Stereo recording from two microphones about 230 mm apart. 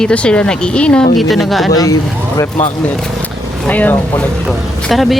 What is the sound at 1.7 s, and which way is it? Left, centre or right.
Speech, centre.